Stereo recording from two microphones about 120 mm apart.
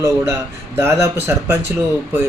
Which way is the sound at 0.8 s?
25° right (ahead or behind).